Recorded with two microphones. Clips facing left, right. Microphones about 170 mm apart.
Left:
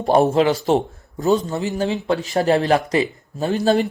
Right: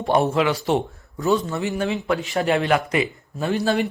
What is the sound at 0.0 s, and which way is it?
Speech, 35° left (ahead or behind).